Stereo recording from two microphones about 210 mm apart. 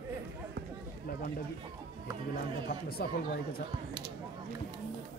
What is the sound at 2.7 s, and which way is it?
Speech, 45° left (ahead or behind).